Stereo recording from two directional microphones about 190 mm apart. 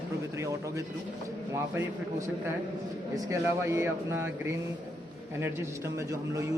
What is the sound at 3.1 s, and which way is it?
Speech, 15° right (ahead or behind).